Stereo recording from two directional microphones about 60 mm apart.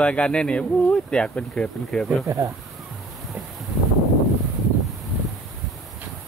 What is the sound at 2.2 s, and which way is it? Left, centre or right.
Speech, right.